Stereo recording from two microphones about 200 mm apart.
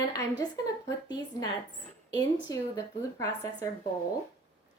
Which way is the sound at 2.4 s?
15° left (ahead or behind).